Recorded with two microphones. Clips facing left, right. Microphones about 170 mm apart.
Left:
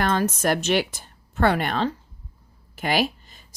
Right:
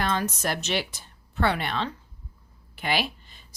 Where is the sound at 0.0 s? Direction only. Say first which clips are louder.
Left 5 dB; 50° left (ahead or behind).